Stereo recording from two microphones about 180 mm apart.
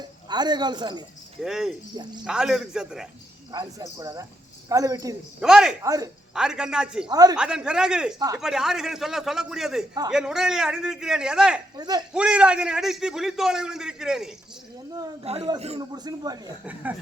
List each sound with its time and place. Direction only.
0.3 s a man's voice: 25° right (ahead or behind)
1.4 s a man's voice: centre (ahead or behind)
3.5 s a man's voice: 25° right (ahead or behind)
5.4 s a man's voice: 5° right (ahead or behind)
5.8 s a man's voice: 20° right (ahead or behind)
6.3 s a man's voice: 5° right (ahead or behind)
7.1 s a man's voice: 20° right (ahead or behind)
7.3 s a man's voice: 5° right (ahead or behind)
11.8 s a man's voice: 20° right (ahead or behind)
12.1 s a man's voice: 5° right (ahead or behind)
15.2 s a man's voice: 35° right (ahead or behind)
15.8 s a man's voice: 20° right (ahead or behind)